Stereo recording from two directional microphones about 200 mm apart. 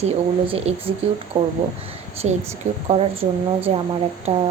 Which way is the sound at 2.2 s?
30° right (ahead or behind).